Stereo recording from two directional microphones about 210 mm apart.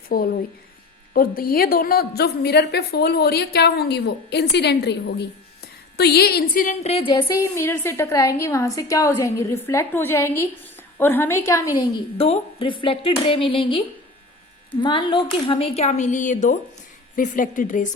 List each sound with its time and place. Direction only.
0.1 s a woman's voice: 45° left (ahead or behind); by 11.7 s 15° left (ahead or behind)
11.8 s a woman's voice: 25° left (ahead or behind)